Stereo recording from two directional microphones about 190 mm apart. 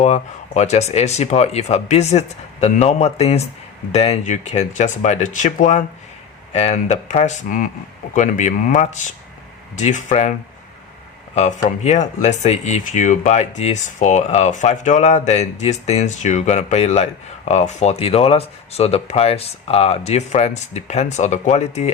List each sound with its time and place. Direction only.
0.0 s speech: 35° left (ahead or behind)
11.3 s speech: 35° left (ahead or behind)